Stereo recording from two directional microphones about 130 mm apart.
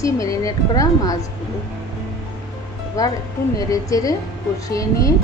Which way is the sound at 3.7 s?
25° left (ahead or behind).